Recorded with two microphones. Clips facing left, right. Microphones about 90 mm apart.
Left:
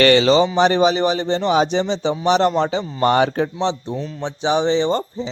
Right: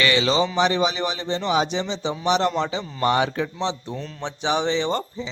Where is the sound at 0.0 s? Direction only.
40° left (ahead or behind).